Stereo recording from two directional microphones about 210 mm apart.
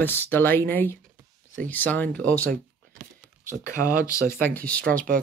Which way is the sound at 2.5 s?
40° right (ahead or behind).